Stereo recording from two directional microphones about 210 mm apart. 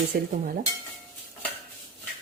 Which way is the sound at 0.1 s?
45° right (ahead or behind).